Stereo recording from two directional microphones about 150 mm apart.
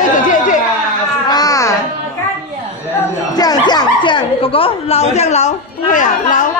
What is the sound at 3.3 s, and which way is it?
Chuckle, 25° left (ahead or behind).